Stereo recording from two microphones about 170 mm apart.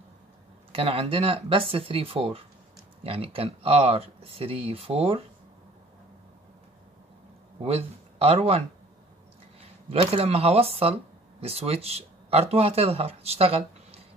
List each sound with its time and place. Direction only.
0.7 s speech: 30° right (ahead or behind)
7.6 s speech: 35° right (ahead or behind)
9.8 s speech: 35° right (ahead or behind)